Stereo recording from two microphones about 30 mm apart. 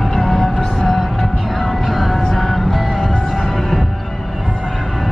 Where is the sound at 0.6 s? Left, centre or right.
Centre.